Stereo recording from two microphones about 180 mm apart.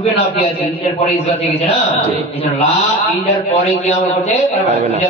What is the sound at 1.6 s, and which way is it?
A man's voice, 35° left (ahead or behind).